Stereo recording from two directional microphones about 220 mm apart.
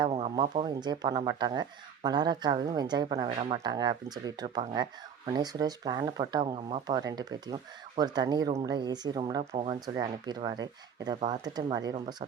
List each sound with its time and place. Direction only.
0.0 s speech: 25° right (ahead or behind)